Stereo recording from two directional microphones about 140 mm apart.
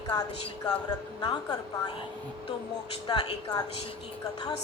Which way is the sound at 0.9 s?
30° left (ahead or behind).